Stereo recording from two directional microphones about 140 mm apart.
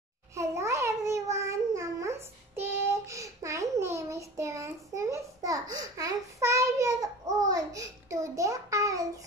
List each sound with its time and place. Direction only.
0.3 s babbling: 20° right (ahead or behind)